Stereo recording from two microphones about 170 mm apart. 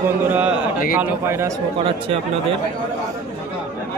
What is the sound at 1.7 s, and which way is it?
Speech, 35° right (ahead or behind).